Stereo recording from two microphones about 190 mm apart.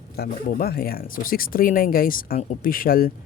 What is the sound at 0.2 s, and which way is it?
Speech, 55° left (ahead or behind).